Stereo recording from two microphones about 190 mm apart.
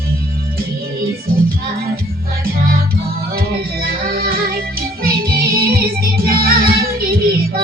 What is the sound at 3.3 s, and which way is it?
Music, 55° right (ahead or behind).